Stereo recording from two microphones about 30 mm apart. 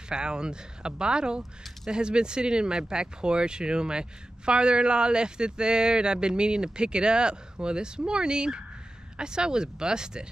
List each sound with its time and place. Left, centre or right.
0.1 s speech: right